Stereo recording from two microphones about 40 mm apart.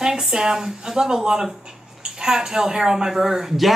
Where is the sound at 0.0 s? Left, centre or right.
Centre.